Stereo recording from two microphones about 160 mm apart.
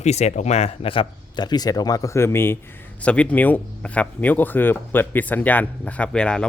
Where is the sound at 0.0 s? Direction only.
45° left (ahead or behind).